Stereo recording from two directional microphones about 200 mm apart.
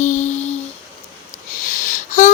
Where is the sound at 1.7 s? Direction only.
40° left (ahead or behind).